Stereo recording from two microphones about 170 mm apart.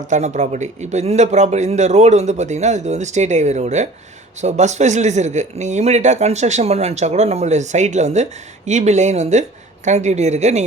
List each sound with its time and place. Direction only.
0.1 s speech: 45° right (ahead or behind)